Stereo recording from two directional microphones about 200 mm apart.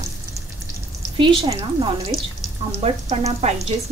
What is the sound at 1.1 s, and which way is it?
A woman's voice, 25° right (ahead or behind).